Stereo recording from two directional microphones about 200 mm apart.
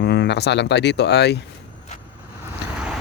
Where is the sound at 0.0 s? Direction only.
55° left (ahead or behind).